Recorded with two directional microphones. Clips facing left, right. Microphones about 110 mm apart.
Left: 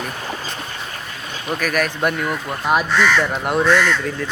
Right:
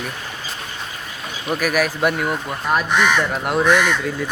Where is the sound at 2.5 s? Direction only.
5° left (ahead or behind).